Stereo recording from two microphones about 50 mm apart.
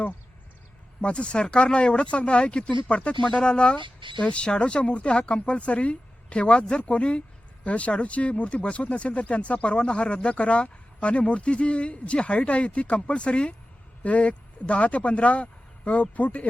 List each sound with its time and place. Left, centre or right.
1.0 s speech: left